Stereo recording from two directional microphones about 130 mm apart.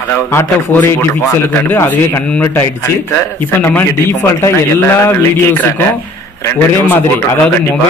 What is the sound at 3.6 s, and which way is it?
A man's voice, 15° left (ahead or behind).